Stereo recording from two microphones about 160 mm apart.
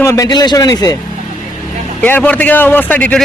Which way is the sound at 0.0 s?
20° left (ahead or behind).